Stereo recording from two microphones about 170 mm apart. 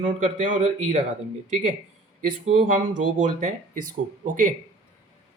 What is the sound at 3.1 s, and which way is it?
Speech, 50° right (ahead or behind).